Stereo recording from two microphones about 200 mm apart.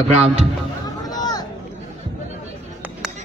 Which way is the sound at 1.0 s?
20° left (ahead or behind).